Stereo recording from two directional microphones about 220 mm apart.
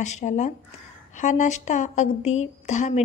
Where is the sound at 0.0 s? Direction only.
35° left (ahead or behind).